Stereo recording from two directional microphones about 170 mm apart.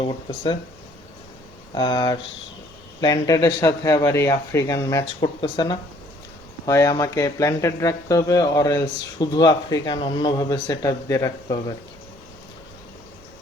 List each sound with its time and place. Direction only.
1.7 s speech: 25° left (ahead or behind)